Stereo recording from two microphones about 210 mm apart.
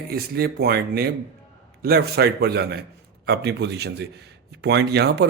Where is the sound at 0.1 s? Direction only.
50° right (ahead or behind).